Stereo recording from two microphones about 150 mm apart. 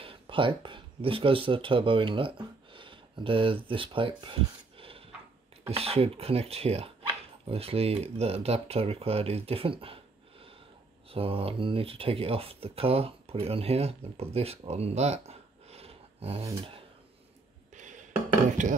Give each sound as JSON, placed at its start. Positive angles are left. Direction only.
{"t": 0.0, "sound": "speech", "side_deg": -35}
{"t": 11.1, "sound": "speech", "side_deg": -40}
{"t": 17.7, "sound": "a sound", "side_deg": -55}